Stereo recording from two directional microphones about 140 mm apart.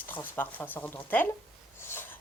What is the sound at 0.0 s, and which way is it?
Speech, 15° left (ahead or behind).